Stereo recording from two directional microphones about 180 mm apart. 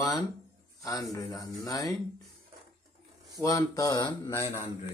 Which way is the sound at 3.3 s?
20° left (ahead or behind).